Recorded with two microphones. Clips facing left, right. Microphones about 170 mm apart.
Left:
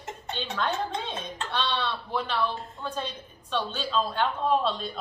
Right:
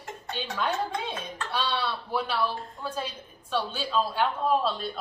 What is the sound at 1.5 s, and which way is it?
Speech, 10° right (ahead or behind).